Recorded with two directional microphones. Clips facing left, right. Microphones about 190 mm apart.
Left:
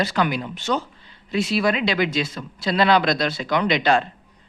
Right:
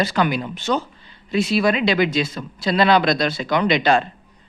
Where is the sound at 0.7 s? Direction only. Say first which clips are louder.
Right 2 dB; 25° right (ahead or behind).